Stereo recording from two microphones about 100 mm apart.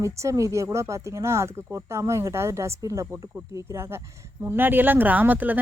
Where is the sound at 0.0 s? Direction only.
30° right (ahead or behind).